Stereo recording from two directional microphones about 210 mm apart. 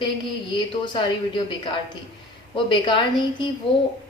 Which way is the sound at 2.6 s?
20° left (ahead or behind).